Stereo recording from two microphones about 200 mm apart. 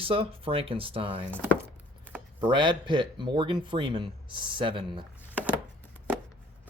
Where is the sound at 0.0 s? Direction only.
30° right (ahead or behind).